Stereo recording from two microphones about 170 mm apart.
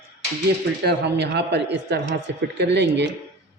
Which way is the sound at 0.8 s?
90° right.